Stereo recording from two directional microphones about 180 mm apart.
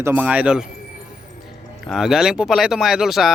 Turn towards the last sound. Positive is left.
turn(degrees=0)  # may be behind; listen again after turning